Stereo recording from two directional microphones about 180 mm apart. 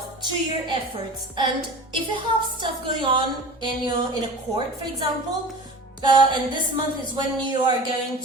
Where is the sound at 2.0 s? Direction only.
25° right (ahead or behind).